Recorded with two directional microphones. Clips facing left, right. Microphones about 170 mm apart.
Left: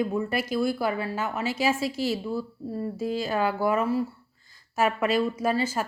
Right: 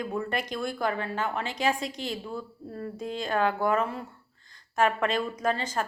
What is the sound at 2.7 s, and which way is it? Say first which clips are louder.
Speech: left 5 dB; 25° left (ahead or behind).